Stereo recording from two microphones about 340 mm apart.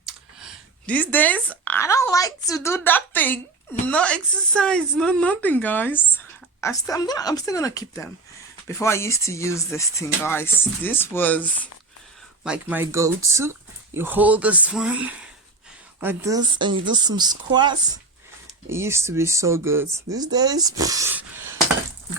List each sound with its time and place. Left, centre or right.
0.0 s speech: centre